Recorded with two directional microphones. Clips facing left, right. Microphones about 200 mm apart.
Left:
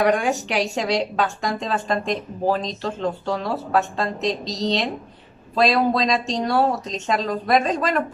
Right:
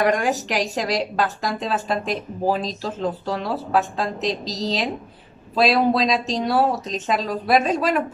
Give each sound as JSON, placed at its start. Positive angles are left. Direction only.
{"t": 0.0, "sound": "a woman's voice", "side_deg": 0}